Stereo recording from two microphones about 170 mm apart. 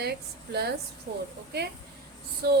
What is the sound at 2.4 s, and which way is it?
Speech, 65° right (ahead or behind).